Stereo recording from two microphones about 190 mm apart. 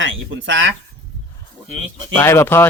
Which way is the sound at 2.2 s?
15° left (ahead or behind).